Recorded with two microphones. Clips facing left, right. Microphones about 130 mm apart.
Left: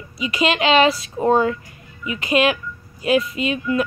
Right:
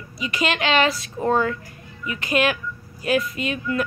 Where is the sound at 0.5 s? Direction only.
25° left (ahead or behind).